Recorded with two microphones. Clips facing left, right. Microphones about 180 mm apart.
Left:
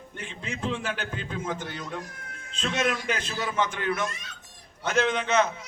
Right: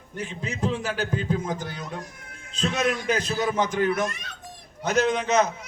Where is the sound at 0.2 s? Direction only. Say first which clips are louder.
Right 5 dB; 40° right (ahead or behind).